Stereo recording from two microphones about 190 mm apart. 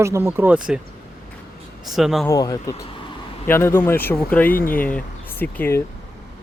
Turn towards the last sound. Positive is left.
turn(degrees=10)  # may be behind; listen again after turning